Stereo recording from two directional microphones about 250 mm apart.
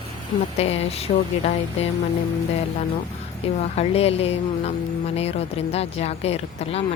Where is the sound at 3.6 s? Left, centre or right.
Left.